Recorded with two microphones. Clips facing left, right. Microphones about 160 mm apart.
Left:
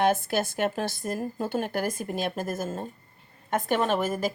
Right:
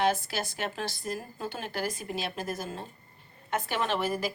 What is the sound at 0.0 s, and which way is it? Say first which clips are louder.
Speech: left 4 dB; 50° left (ahead or behind).